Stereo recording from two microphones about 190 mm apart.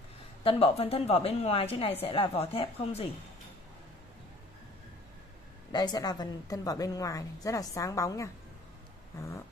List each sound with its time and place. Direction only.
0.4 s a woman's voice: 30° left (ahead or behind)
5.7 s a woman's voice: 20° left (ahead or behind)